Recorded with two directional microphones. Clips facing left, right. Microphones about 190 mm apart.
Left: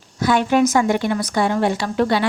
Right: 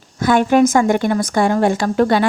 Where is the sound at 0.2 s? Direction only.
50° right (ahead or behind).